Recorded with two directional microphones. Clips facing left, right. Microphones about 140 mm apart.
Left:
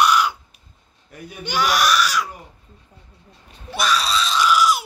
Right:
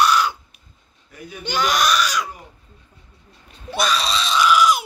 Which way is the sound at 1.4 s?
10° left (ahead or behind).